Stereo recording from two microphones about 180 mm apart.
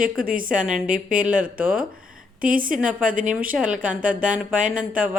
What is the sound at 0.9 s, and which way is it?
Speech, 50° right (ahead or behind).